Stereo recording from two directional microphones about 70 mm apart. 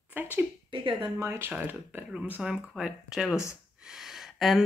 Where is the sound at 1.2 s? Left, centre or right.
Right.